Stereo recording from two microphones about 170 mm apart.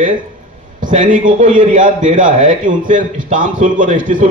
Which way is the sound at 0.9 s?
50° right (ahead or behind).